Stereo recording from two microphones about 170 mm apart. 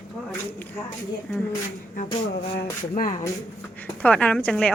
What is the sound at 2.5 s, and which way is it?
Speech, 55° left (ahead or behind).